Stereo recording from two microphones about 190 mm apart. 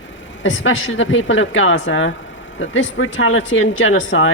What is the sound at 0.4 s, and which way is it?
Speech, 90° left.